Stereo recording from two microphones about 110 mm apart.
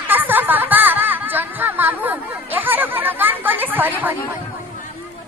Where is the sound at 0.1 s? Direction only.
15° right (ahead or behind).